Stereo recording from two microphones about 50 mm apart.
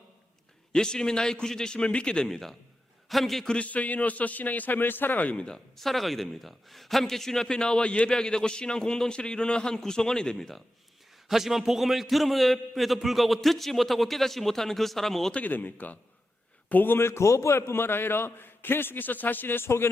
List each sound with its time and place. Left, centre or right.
0.7 s a man's voice: centre
3.5 s a man's voice: left
5.5 s a man's voice: centre
11.3 s a man's voice: centre
15.4 s a man's voice: left